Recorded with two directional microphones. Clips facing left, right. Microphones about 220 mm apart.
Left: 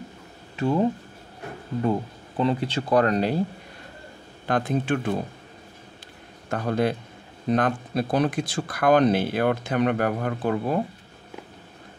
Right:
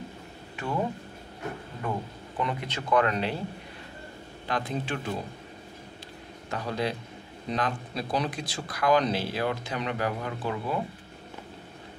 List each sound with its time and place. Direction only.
0.6 s speech: 25° left (ahead or behind)
4.5 s speech: 50° left (ahead or behind)
6.5 s speech: 50° left (ahead or behind)